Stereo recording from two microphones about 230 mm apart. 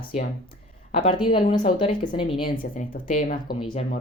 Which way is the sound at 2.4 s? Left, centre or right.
Left.